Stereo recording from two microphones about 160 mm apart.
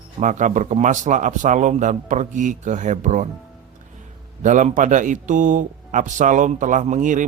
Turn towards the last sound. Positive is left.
turn(degrees=-50)  # may be behind; listen again after turning